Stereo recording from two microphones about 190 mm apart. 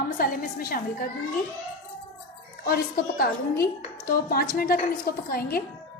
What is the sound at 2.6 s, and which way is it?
A woman's voice, 50° left (ahead or behind).